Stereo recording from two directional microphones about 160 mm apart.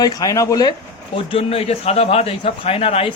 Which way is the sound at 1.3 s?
35° left (ahead or behind).